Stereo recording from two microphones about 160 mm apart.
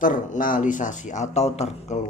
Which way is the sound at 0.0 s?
55° left (ahead or behind).